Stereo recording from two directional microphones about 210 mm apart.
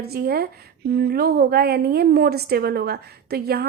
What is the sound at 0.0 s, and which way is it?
A woman's voice, 45° right (ahead or behind).